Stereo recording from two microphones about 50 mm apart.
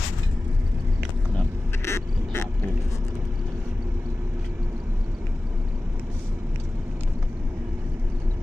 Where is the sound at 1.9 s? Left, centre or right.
Left.